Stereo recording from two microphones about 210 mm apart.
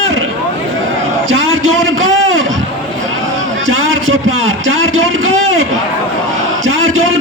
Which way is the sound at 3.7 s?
70° right (ahead or behind).